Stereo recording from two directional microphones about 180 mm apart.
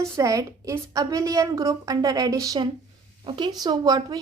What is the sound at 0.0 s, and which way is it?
A woman's voice, 15° right (ahead or behind).